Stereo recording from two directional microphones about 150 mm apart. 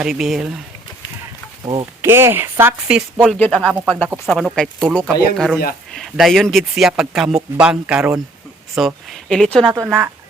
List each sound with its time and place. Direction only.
0.0 s speech: 5° right (ahead or behind)
1.6 s speech: 35° right (ahead or behind)
2.0 s speech: 15° right (ahead or behind)
3.2 s speech: 5° left (ahead or behind)
9.6 s speech: 20° right (ahead or behind)